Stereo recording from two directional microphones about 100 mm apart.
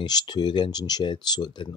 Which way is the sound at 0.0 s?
45° left (ahead or behind).